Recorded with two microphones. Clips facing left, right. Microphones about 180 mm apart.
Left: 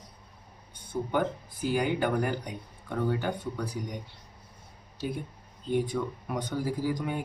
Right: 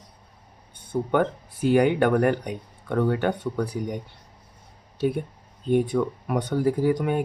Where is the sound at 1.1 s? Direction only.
65° right (ahead or behind).